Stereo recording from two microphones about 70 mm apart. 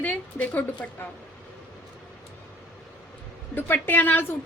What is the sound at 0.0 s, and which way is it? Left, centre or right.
Speech, left.